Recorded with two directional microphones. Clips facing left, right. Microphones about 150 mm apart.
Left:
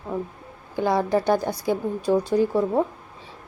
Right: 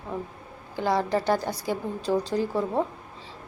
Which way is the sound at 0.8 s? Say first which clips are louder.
Left 3 dB; 15° left (ahead or behind).